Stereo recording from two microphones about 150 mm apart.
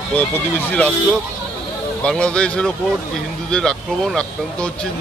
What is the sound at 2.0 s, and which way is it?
Speech, 5° left (ahead or behind).